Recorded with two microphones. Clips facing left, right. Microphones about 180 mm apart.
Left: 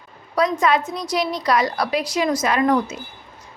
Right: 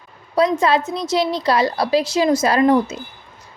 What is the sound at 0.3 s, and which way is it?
A woman's voice, 25° right (ahead or behind).